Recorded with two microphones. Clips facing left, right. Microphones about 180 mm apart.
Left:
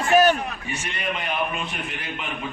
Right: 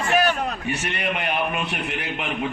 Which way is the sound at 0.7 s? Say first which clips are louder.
Right 3 dB; 65° right (ahead or behind).